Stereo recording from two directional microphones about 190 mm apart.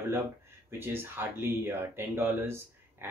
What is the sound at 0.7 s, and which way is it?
Speech, 10° right (ahead or behind).